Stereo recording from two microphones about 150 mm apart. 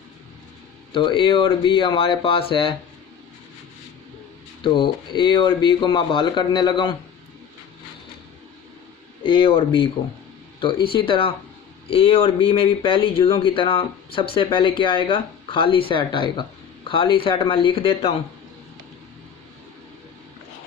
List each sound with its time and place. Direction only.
0.9 s speech: 35° left (ahead or behind)
4.6 s speech: 30° left (ahead or behind)
9.2 s speech: 35° left (ahead or behind)